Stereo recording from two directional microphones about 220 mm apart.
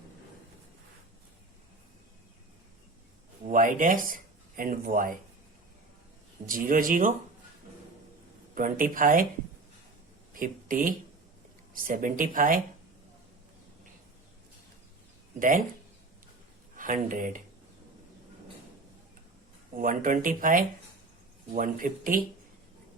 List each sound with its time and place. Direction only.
3.4 s speech: 35° right (ahead or behind)
6.5 s speech: 40° right (ahead or behind)
8.5 s speech: 40° right (ahead or behind)
10.3 s speech: 40° right (ahead or behind)
15.4 s speech: 35° right (ahead or behind)
16.7 s speech: 35° right (ahead or behind)
19.7 s speech: 40° right (ahead or behind)